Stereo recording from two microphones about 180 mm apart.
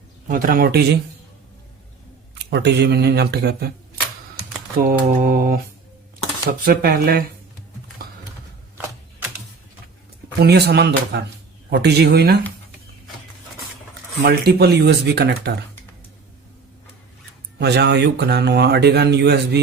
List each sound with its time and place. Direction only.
0.3 s speech: 50° right (ahead or behind)
2.4 s speech: 65° right (ahead or behind)
4.8 s mantra: 50° right (ahead or behind)
6.7 s speech: 55° right (ahead or behind)
10.4 s speech: 65° right (ahead or behind)
14.3 s speech: 60° right (ahead or behind)
17.6 s speech: 65° right (ahead or behind)